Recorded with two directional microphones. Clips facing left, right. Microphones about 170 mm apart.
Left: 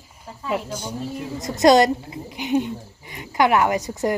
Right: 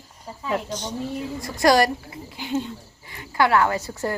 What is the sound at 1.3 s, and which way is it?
Speech, 20° left (ahead or behind).